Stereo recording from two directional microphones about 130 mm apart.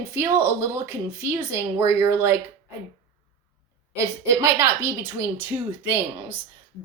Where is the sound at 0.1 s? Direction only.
20° right (ahead or behind).